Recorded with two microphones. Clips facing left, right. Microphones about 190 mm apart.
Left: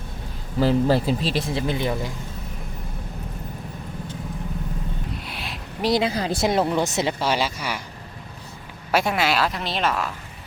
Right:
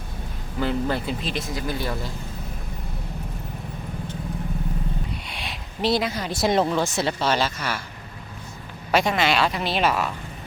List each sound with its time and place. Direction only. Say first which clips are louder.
0.6 s speech: left 6 dB; 35° left (ahead or behind); by 2.0 s 15° left (ahead or behind)
5.3 s a sound: left 1 dB; 5° left (ahead or behind)
5.9 s speech: left 3 dB; 25° left (ahead or behind)
6.5 s speech: right 3 dB; 10° left (ahead or behind)
8.9 s a woman's voice: right 1 dB; 5° left (ahead or behind)